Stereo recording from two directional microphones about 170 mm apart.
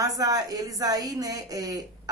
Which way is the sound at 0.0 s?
20° right (ahead or behind).